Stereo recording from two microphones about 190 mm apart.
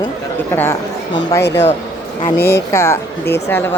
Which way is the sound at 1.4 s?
65° left (ahead or behind).